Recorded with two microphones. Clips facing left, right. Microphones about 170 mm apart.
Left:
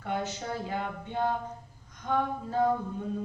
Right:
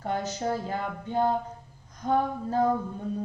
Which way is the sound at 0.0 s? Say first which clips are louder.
Right 4 dB; 40° right (ahead or behind).